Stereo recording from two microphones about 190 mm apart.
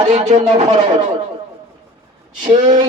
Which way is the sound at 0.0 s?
35° right (ahead or behind).